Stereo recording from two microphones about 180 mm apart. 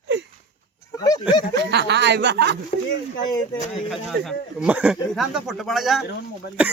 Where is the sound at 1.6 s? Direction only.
70° right (ahead or behind).